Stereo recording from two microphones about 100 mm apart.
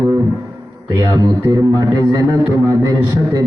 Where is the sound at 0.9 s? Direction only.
40° right (ahead or behind).